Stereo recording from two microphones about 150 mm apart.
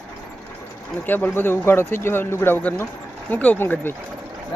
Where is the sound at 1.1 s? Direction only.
15° left (ahead or behind).